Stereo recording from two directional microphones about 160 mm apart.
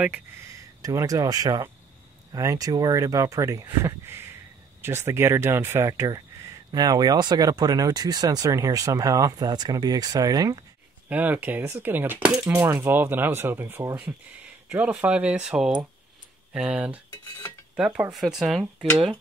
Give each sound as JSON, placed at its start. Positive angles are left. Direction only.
{"t": 0.0, "sound": "speech", "side_deg": -15}
{"t": 11.1, "sound": "speech", "side_deg": -10}